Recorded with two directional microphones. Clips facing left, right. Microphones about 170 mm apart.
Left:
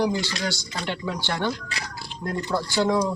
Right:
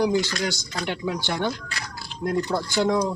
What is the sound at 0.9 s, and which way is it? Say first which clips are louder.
Speech: right 1 dB; 15° right (ahead or behind).